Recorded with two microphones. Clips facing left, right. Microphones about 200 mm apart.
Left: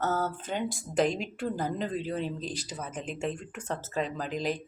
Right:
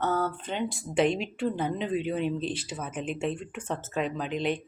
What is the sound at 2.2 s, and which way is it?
Speech, 40° left (ahead or behind).